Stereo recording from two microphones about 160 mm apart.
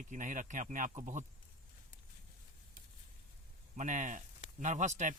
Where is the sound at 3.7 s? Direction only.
50° right (ahead or behind).